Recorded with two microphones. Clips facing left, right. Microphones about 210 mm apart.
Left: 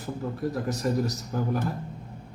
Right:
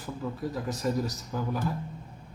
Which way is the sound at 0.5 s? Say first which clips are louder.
Left 3 dB; 60° left (ahead or behind).